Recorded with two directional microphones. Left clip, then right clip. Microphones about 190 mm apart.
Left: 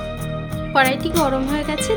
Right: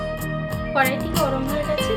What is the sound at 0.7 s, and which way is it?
Speech, 65° left (ahead or behind).